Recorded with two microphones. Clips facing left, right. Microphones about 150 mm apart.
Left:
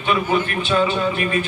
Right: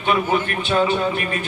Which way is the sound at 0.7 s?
45° right (ahead or behind).